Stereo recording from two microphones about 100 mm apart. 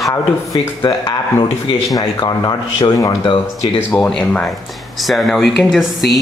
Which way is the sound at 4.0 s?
5° left (ahead or behind).